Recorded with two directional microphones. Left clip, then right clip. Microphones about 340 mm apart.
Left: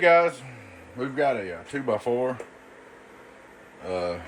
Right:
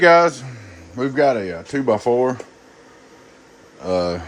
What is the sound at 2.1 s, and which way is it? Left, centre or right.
Speech, right.